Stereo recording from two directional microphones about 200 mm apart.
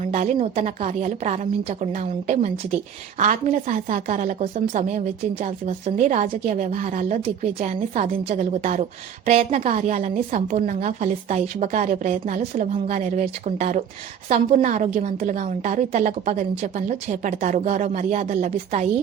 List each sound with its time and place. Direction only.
0.1 s a woman's voice: 35° right (ahead or behind)